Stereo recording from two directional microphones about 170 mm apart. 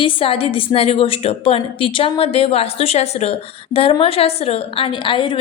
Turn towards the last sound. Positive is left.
turn(degrees=30)  # may be behind; listen again after turning